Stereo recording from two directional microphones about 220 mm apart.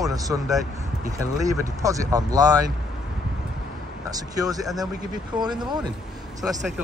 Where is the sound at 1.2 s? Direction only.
15° right (ahead or behind).